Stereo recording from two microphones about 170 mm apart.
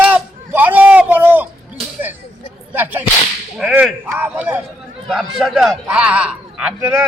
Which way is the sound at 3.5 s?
5° right (ahead or behind).